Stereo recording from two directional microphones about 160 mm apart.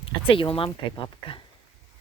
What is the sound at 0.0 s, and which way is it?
Speech, 35° left (ahead or behind).